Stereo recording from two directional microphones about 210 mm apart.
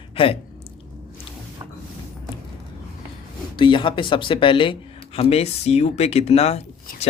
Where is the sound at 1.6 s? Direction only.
20° right (ahead or behind).